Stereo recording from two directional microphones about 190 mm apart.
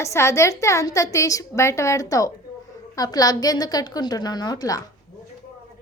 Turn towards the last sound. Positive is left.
turn(degrees=20)  # may be behind; listen again after turning